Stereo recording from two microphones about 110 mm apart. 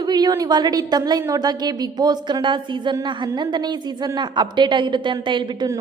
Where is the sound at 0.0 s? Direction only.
40° right (ahead or behind).